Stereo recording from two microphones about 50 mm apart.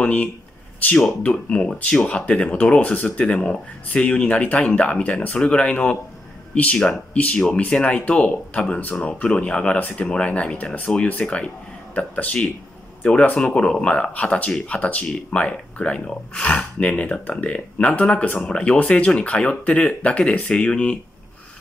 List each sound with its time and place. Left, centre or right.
0.0 s speech: left